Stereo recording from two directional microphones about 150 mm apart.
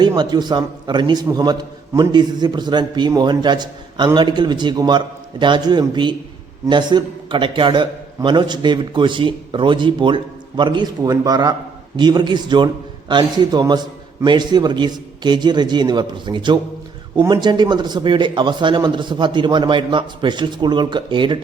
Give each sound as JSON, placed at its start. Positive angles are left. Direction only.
{"t": 0.2, "sound": "a man's voice", "side_deg": -30}